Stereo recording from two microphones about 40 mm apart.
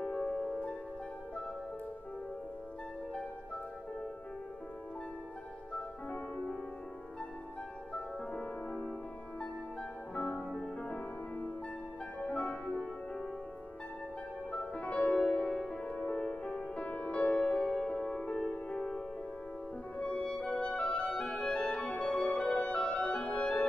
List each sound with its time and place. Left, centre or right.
0.0 s music: left
7.9 s music: left
10.9 s music: left
14.5 s music: left
15.4 s music: centre; by 17.6 s left
17.6 s music: left
18.2 s music: left
20.0 s clarinet: left
21.3 s music: left